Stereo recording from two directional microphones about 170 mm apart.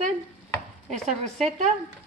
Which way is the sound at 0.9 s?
40° right (ahead or behind).